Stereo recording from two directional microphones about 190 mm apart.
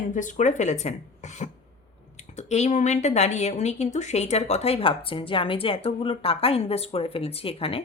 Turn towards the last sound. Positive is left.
turn(degrees=30)  # may be behind; listen again after turning